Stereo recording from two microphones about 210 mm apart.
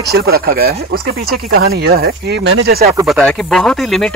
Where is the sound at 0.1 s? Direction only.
45° right (ahead or behind).